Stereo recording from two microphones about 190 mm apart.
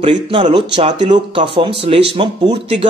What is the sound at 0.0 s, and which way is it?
Speech, 25° right (ahead or behind).